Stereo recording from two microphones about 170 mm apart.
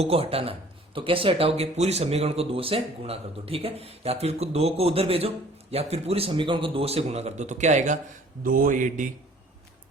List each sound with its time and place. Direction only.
0.0 s speech: 35° right (ahead or behind)